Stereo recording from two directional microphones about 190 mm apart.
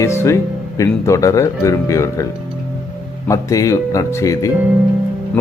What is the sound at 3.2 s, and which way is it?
Speech, 15° left (ahead or behind).